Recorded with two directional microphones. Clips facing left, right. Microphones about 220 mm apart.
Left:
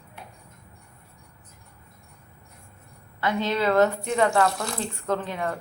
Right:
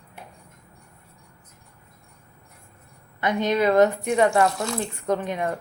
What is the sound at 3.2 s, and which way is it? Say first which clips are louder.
A woman's voice: right 3 dB; 20° right (ahead or behind).